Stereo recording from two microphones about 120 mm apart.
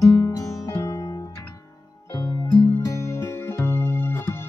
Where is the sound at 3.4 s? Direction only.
20° left (ahead or behind).